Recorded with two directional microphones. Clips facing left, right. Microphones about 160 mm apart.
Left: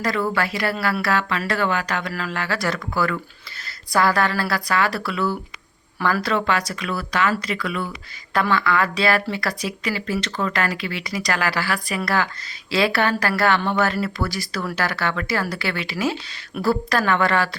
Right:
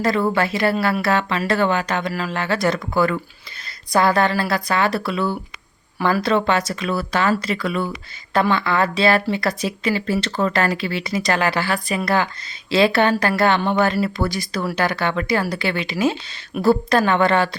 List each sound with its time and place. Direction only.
0.0 s speech: 25° right (ahead or behind)